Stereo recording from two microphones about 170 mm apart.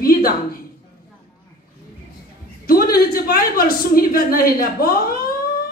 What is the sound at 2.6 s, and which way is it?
Speech, 60° left (ahead or behind).